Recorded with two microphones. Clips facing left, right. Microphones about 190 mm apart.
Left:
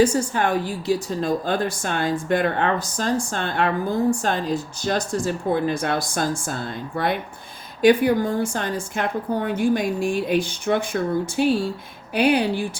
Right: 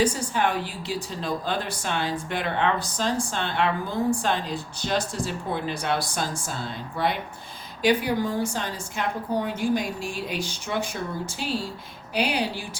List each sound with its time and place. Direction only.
0.0 s a woman's voice: 45° left (ahead or behind)